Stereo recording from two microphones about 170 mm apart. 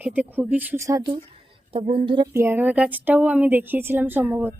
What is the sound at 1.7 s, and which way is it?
Speech, 35° right (ahead or behind).